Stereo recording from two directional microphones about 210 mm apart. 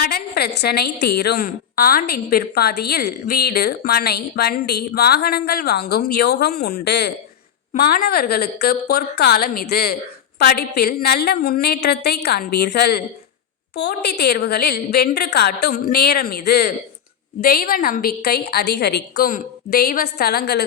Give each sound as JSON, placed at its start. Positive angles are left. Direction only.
{"t": 0.0, "sound": "a woman's voice", "side_deg": 50}
{"t": 7.7, "sound": "a woman's voice", "side_deg": 45}